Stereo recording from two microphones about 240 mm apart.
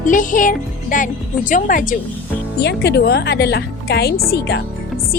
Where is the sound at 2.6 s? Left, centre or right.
Left.